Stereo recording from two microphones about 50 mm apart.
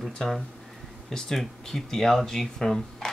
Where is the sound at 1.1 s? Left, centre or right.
Centre.